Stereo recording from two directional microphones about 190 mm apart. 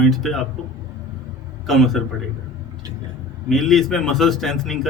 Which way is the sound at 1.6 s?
Centre (ahead or behind).